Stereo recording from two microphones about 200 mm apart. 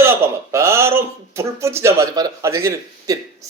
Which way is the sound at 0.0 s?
10° right (ahead or behind).